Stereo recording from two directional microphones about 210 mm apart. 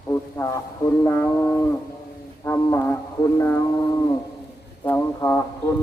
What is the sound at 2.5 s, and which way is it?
Music, 10° left (ahead or behind).